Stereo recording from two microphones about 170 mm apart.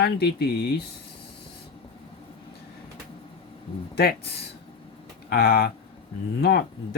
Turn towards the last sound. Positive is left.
turn(degrees=65)  # may be behind; listen again after turning